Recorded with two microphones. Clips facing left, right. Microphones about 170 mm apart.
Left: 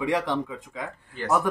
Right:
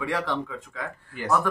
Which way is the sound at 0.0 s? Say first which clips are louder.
Left 3 dB; 15° left (ahead or behind).